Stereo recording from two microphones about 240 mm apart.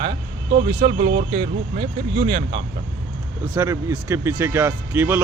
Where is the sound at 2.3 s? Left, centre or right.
Right.